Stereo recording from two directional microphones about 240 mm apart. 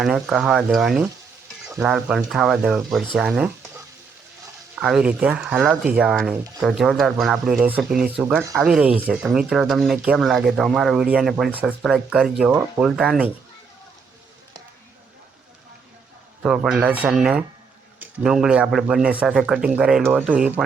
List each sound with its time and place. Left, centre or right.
0.0 s speech: centre
4.8 s speech: centre
16.4 s speech: centre